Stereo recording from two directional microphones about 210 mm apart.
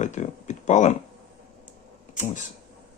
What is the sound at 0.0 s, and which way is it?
Speech, 35° left (ahead or behind).